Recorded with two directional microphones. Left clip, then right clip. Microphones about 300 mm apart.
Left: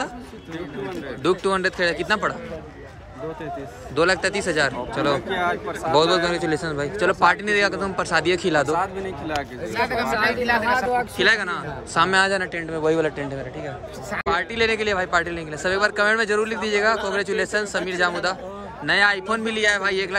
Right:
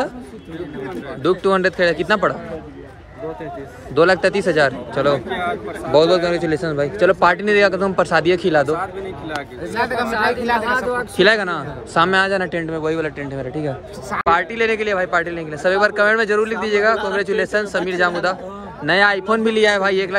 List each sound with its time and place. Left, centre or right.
1.2 s a man's voice: centre
3.9 s a man's voice: centre
5.3 s speech: centre
5.9 s a man's voice: centre
9.8 s a man's voice: centre